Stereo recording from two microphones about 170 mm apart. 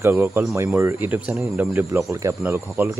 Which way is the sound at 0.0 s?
10° right (ahead or behind).